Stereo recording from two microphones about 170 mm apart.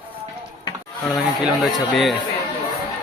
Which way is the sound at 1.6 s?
Centre (ahead or behind).